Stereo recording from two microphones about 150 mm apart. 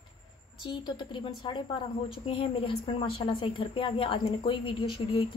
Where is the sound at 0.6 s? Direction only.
30° left (ahead or behind).